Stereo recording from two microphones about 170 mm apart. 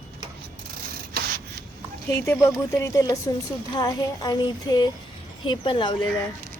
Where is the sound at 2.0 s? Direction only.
15° left (ahead or behind).